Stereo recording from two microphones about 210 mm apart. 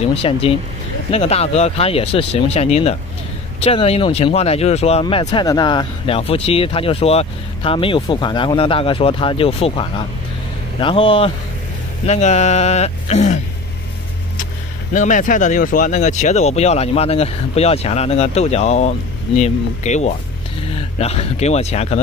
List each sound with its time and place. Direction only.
0.0 s speech: 25° left (ahead or behind)